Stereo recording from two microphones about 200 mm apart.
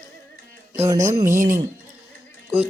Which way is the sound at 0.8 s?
15° right (ahead or behind).